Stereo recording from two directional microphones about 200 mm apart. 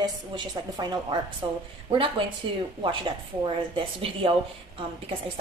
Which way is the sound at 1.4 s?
25° right (ahead or behind).